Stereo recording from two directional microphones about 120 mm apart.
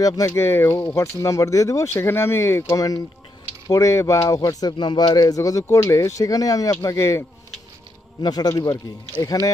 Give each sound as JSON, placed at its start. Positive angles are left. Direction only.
{"t": 0.0, "sound": "speech", "side_deg": 25}
{"t": 8.2, "sound": "speech", "side_deg": 35}